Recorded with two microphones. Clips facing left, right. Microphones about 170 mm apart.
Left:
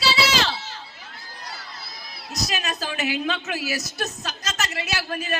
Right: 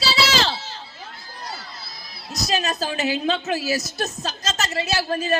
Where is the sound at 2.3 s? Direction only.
30° right (ahead or behind).